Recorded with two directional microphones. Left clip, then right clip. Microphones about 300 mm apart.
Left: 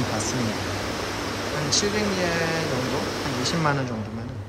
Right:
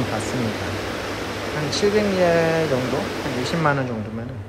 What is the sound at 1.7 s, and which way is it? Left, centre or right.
Speech, centre.